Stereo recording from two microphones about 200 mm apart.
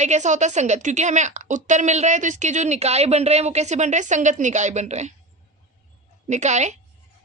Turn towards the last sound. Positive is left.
turn(degrees=-35)  # may be behind; listen again after turning